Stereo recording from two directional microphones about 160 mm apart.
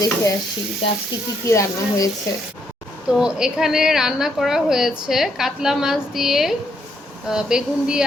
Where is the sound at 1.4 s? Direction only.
20° left (ahead or behind).